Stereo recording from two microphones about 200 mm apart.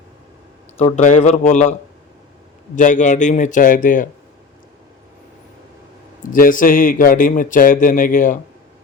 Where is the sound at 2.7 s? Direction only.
40° left (ahead or behind).